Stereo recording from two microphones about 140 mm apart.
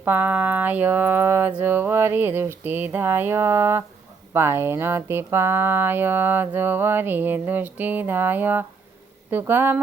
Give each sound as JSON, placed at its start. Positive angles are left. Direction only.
{"t": 0.0, "sound": "speech", "side_deg": -15}